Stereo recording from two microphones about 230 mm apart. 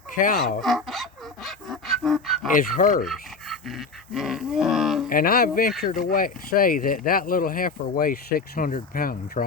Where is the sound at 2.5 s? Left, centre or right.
Left.